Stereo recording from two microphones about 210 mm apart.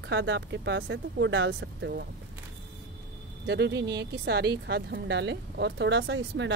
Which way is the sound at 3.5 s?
55° right (ahead or behind).